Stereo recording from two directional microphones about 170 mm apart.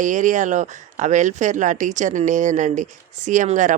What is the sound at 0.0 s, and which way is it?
Speech, 45° right (ahead or behind).